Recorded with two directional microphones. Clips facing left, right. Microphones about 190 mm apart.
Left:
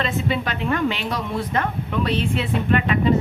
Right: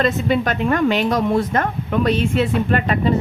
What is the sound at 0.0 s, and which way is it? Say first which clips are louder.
A woman's voice: right 5 dB; 45° right (ahead or behind).